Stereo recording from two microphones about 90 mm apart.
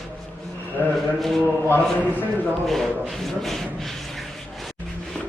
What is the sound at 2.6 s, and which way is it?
Speech, centre (ahead or behind).